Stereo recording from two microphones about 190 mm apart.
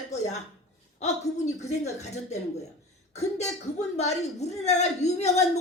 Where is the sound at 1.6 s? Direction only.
35° left (ahead or behind).